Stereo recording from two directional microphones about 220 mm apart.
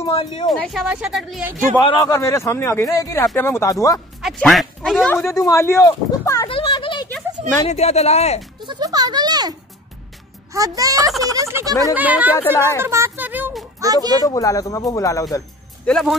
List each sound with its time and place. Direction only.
0.1 s speech: 20° left (ahead or behind)
0.5 s speech: centre (ahead or behind)
1.8 s speech: 20° left (ahead or behind)
4.2 s speech: centre (ahead or behind)
5.1 s speech: 15° left (ahead or behind)
8.5 s music: 20° right (ahead or behind)
10.5 s speech: 15° right (ahead or behind)
12.4 s speech: 15° left (ahead or behind)
12.8 s a sound: 10° right (ahead or behind)
13.7 s a child's voice: 15° right (ahead or behind)
14.2 s speech: 15° left (ahead or behind)